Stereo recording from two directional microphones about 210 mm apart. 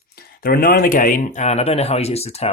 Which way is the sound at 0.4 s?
45° left (ahead or behind).